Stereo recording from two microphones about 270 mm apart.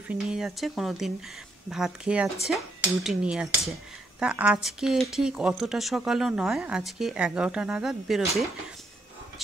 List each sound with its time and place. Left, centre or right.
0.1 s speech: centre